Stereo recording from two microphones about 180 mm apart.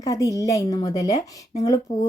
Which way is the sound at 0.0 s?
20° left (ahead or behind).